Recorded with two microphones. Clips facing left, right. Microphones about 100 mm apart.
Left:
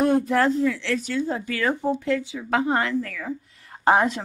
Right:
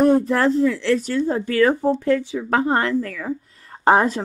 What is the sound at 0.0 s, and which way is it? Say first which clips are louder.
A woman's voice: right 3 dB; 35° right (ahead or behind).